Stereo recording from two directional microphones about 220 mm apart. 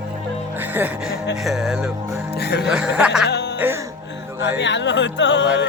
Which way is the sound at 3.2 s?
50° left (ahead or behind).